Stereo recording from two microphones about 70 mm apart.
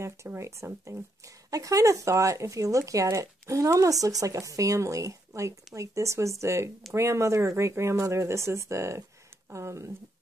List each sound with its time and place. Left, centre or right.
0.4 s speech: right
1.2 s speech: right